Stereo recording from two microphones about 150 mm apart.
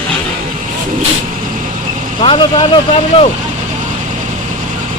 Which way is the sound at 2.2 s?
35° left (ahead or behind).